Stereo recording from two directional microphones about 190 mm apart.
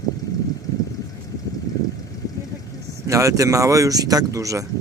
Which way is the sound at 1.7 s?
20° left (ahead or behind).